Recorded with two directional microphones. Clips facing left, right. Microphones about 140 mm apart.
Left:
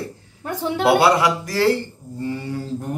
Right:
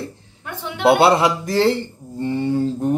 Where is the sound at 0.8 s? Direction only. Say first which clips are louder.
Right 2 dB; 25° right (ahead or behind).